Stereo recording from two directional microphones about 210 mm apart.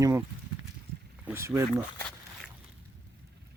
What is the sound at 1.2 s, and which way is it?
Speech, 10° right (ahead or behind).